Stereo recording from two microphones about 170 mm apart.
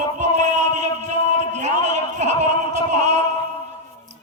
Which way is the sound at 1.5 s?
45° right (ahead or behind).